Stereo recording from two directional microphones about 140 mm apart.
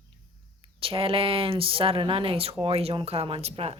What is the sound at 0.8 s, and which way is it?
Speech, 40° right (ahead or behind).